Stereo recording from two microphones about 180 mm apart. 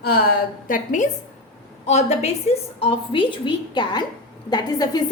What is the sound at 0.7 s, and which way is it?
A woman's voice, 45° left (ahead or behind).